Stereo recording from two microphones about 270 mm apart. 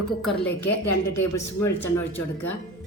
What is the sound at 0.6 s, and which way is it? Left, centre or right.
Speech, left.